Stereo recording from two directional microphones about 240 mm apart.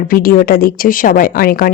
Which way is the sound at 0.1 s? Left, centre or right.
Left.